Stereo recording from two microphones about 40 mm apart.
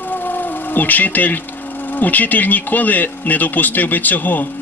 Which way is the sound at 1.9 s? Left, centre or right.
Left.